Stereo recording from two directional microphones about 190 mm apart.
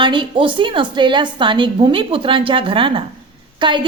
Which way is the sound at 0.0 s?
25° right (ahead or behind).